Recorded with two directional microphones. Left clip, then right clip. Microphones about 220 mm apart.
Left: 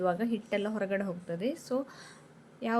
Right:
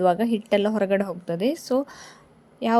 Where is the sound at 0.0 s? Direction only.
30° right (ahead or behind).